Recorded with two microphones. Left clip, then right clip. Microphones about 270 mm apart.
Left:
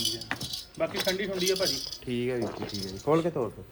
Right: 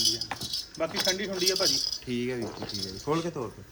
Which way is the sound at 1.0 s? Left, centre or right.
Right.